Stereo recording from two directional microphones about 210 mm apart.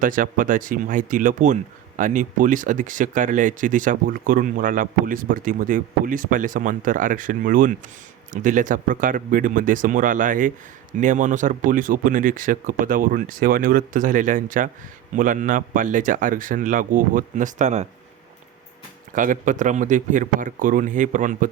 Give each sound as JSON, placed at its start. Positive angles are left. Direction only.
{"t": 0.0, "sound": "speech", "side_deg": -40}
{"t": 19.1, "sound": "speech", "side_deg": -40}